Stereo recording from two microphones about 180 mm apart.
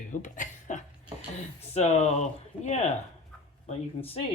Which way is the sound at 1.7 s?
40° left (ahead or behind).